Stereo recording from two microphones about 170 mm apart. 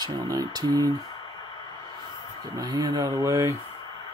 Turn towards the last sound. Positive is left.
turn(degrees=-15)  # may be behind; listen again after turning